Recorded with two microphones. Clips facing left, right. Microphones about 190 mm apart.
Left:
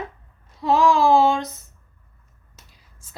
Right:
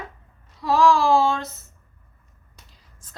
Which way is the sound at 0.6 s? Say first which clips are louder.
Left 1 dB; 20° left (ahead or behind).